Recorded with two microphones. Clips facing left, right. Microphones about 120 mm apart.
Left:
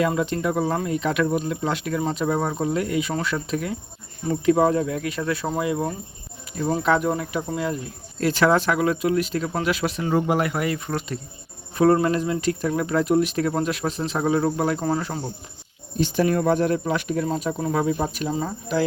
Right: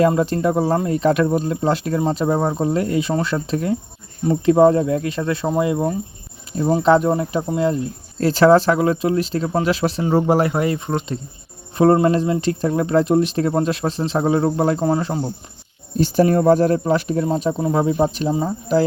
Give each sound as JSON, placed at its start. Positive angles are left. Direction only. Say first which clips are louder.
{"t": 0.0, "sound": "speech", "louder": "right 6 dB", "side_deg": -35}
{"t": 16.0, "sound": "speech", "louder": "right 5 dB", "side_deg": -35}